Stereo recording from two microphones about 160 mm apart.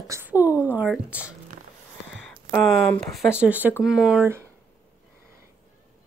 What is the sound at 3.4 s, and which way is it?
Speech, 10° right (ahead or behind).